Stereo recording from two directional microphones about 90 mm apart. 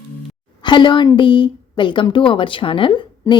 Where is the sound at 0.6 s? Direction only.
60° left (ahead or behind).